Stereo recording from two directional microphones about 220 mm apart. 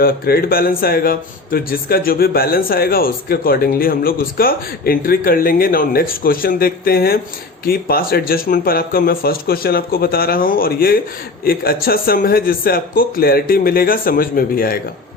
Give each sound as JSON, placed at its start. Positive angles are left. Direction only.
{"t": 0.0, "sound": "a man's voice", "side_deg": 45}